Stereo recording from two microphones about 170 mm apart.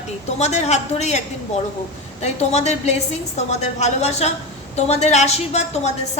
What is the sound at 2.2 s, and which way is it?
A woman's voice, 40° left (ahead or behind).